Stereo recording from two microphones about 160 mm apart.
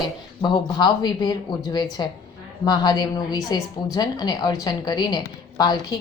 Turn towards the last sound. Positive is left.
turn(degrees=25)  # may be behind; listen again after turning